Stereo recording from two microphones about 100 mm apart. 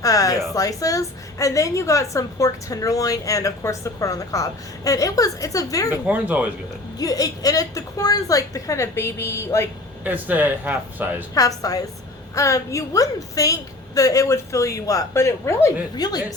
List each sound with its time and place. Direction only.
0.0 s a woman's voice: 35° left (ahead or behind)
5.9 s speech: 15° right (ahead or behind)
7.0 s a woman's voice: 35° left (ahead or behind)
10.0 s speech: 15° right (ahead or behind)
11.3 s a woman's voice: 35° left (ahead or behind)
16.0 s speech: 45° left (ahead or behind)